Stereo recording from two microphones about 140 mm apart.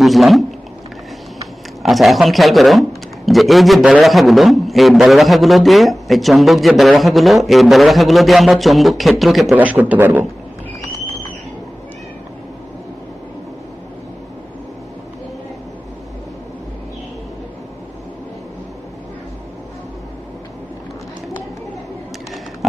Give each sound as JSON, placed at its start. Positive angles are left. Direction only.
{"t": 0.0, "sound": "speech", "side_deg": 0}
{"t": 1.8, "sound": "a man's voice", "side_deg": 0}